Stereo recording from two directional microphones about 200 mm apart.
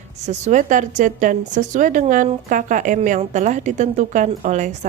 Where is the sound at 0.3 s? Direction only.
35° right (ahead or behind).